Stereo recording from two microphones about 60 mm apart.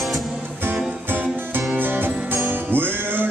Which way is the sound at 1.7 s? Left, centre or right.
Right.